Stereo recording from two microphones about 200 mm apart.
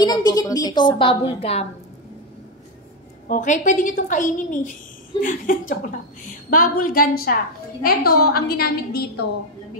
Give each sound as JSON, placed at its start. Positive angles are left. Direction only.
{"t": 0.0, "sound": "a woman's voice", "side_deg": 20}
{"t": 3.3, "sound": "a woman's voice", "side_deg": 40}